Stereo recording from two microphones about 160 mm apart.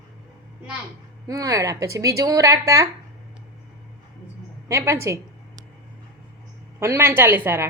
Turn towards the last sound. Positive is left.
turn(degrees=-15)  # may be behind; listen again after turning